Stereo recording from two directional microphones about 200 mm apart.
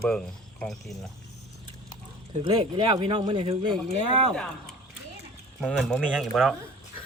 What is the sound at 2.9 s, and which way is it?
Speech, 25° right (ahead or behind).